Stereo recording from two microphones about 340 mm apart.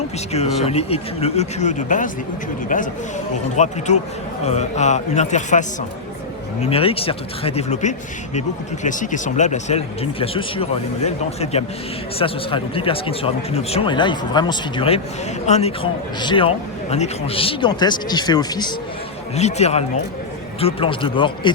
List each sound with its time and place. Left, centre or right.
0.3 s speech: centre